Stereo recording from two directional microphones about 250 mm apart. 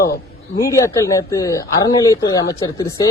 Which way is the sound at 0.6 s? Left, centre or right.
Centre.